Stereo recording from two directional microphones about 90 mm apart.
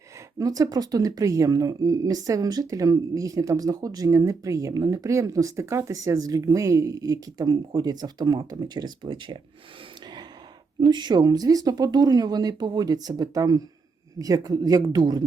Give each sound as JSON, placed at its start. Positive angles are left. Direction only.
{"t": 0.3, "sound": "speech", "side_deg": -40}
{"t": 10.8, "sound": "speech", "side_deg": -55}